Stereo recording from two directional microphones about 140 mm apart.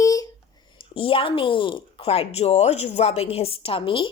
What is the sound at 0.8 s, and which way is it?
Speech, 40° left (ahead or behind).